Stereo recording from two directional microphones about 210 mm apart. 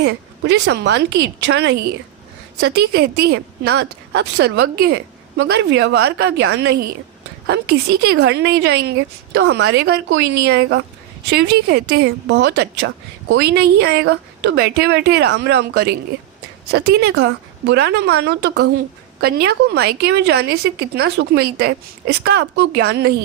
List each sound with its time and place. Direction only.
0.0 s a woman's voice: 55° right (ahead or behind)
11.3 s a woman's voice: 50° right (ahead or behind)